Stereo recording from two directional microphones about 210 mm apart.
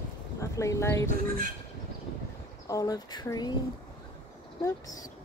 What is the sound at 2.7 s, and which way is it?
Speech, 15° left (ahead or behind).